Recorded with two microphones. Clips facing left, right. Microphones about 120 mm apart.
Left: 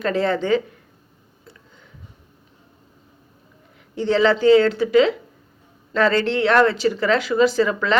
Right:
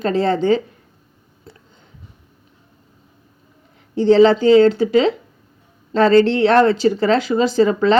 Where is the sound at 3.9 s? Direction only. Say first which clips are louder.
Right 6 dB; 30° right (ahead or behind).